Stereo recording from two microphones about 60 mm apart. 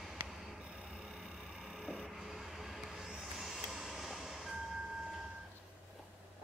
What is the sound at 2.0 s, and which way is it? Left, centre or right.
Vehicle, centre.